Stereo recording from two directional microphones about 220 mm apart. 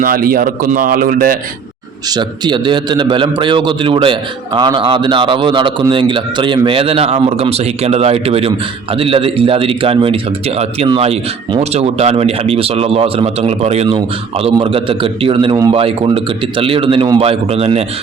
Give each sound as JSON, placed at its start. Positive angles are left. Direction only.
{"t": 0.0, "sound": "a man's voice", "side_deg": -40}
{"t": 2.0, "sound": "a man's voice", "side_deg": -20}